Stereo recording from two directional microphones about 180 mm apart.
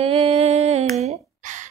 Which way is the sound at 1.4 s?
45° right (ahead or behind).